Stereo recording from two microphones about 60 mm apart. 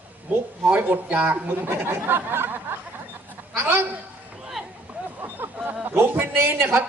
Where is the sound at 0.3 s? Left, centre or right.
Right.